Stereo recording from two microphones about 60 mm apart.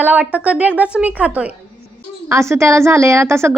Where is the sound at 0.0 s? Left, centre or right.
Right.